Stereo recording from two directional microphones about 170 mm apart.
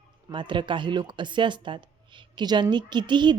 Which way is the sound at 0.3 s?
30° right (ahead or behind).